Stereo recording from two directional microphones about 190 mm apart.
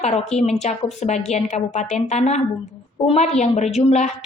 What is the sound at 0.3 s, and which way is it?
A woman's voice, 35° left (ahead or behind).